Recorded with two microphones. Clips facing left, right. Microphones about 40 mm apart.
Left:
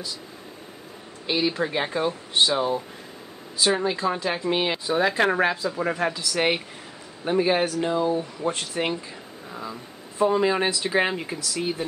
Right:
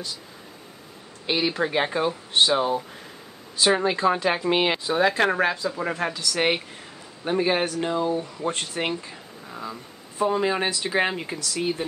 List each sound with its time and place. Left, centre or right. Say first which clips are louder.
1.3 s speech: right 1 dB; centre
3.8 s speech: right 3 dB; centre
4.8 s speech: even; centre